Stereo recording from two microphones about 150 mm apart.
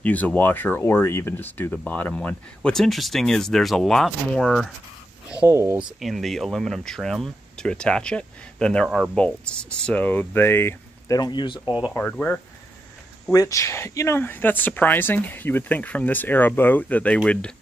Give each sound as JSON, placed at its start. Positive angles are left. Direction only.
{"t": 0.0, "sound": "speech", "side_deg": 10}
{"t": 5.5, "sound": "speech", "side_deg": -20}
{"t": 5.9, "sound": "speech", "side_deg": 0}
{"t": 11.9, "sound": "speech", "side_deg": 10}
{"t": 13.3, "sound": "speech", "side_deg": 20}